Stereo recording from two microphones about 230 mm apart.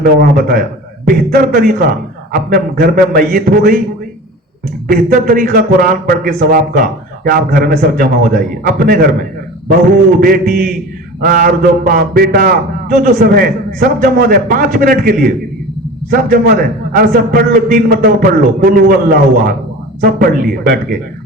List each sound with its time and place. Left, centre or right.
0.0 s a man's voice: right
4.9 s a man's voice: right
10.2 s a man's voice: right